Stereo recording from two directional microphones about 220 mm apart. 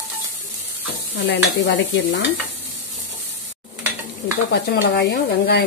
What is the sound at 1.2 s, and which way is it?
Stir, 55° left (ahead or behind).